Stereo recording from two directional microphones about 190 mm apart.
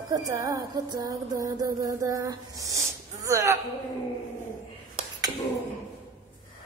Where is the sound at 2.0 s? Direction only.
15° right (ahead or behind).